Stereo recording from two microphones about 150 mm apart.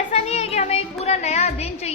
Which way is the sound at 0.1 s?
45° left (ahead or behind).